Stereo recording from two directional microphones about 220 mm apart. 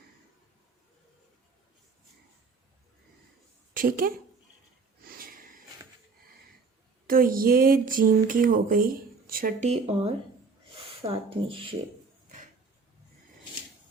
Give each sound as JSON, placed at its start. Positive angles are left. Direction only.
{"t": 3.8, "sound": "speech", "side_deg": -40}
{"t": 5.0, "sound": "a sound", "side_deg": -40}
{"t": 7.1, "sound": "speech", "side_deg": -40}